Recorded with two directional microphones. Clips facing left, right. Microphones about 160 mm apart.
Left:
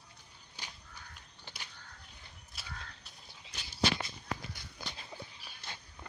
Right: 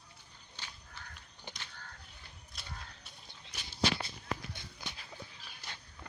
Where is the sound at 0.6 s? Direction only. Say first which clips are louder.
Left 1 dB; 10° left (ahead or behind).